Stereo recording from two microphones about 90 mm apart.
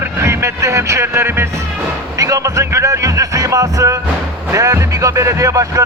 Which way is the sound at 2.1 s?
40° right (ahead or behind).